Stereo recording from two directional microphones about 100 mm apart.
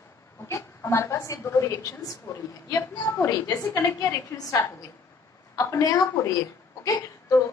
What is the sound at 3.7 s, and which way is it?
Speech, 25° left (ahead or behind).